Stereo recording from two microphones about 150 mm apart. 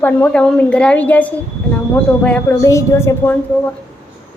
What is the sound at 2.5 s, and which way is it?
A woman's voice, 20° left (ahead or behind).